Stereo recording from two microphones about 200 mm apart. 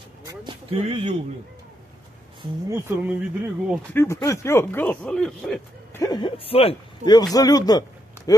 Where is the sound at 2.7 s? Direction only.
15° right (ahead or behind).